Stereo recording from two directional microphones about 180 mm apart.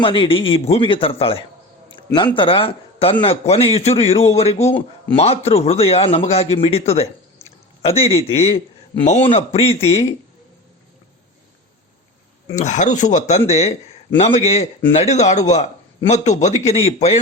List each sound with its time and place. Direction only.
0.0 s speech: 30° left (ahead or behind)
12.5 s speech: 45° left (ahead or behind)